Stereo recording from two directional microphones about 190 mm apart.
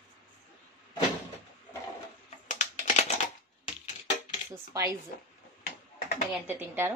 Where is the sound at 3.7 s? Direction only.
40° left (ahead or behind).